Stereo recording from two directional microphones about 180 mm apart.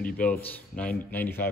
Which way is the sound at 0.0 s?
10° left (ahead or behind).